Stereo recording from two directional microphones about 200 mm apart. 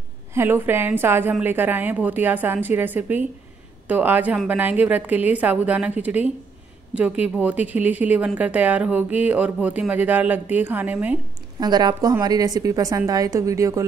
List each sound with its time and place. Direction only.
0.3 s speech: 10° right (ahead or behind)
11.6 s speech: 20° right (ahead or behind)